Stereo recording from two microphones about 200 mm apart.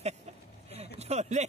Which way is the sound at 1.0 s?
35° right (ahead or behind).